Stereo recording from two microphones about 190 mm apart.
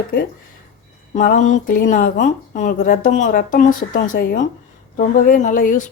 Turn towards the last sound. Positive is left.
turn(degrees=45)  # may be behind; listen again after turning